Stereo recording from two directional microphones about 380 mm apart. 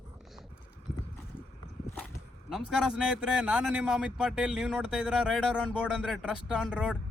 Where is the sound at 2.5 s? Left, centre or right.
Centre.